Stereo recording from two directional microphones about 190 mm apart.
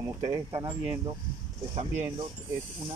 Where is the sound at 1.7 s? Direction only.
35° right (ahead or behind).